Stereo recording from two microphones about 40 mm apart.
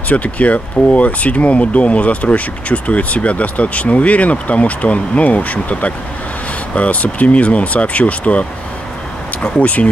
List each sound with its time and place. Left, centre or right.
0.1 s speech: left
9.6 s speech: left